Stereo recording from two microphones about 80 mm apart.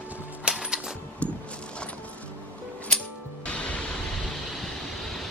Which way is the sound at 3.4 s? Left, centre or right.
Centre.